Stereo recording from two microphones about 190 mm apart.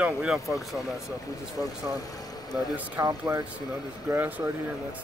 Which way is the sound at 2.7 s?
10° right (ahead or behind).